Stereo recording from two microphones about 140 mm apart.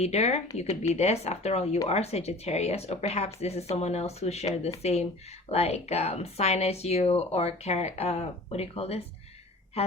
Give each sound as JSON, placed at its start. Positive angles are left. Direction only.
{"t": 0.0, "sound": "speech", "side_deg": 50}